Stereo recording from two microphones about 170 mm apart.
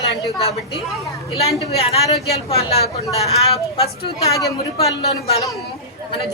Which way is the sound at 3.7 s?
35° left (ahead or behind).